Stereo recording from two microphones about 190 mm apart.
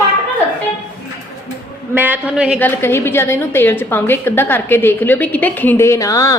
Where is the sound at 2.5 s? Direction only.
10° left (ahead or behind).